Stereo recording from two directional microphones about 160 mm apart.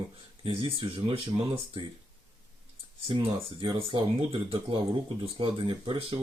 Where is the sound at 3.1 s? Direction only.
35° right (ahead or behind).